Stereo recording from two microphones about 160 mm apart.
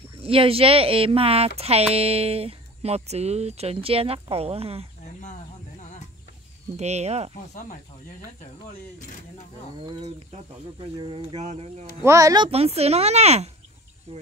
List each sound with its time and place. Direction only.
0.2 s speech: 35° right (ahead or behind)
6.8 s speech: 45° right (ahead or behind)
11.0 s speech: 40° right (ahead or behind)
12.0 s speech: 20° right (ahead or behind)
12.4 s speech: 40° right (ahead or behind)